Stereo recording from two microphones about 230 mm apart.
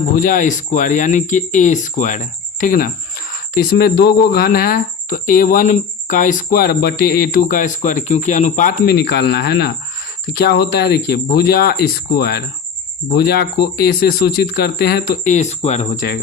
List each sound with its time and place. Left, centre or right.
0.1 s speech: left
8.8 s speech: left